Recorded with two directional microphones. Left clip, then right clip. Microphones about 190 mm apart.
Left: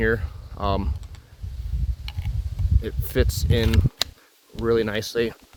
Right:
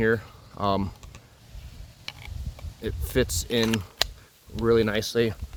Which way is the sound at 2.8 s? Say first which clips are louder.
Even; centre (ahead or behind).